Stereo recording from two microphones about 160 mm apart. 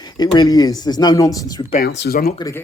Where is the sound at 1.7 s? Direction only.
85° left.